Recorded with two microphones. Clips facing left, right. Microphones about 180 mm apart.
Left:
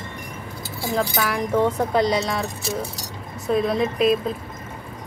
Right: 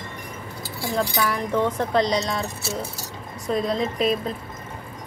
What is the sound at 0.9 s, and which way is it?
Speech, 10° left (ahead or behind).